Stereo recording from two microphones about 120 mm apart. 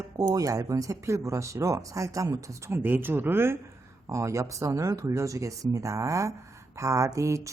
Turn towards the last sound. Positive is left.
turn(degrees=-25)  # may be behind; listen again after turning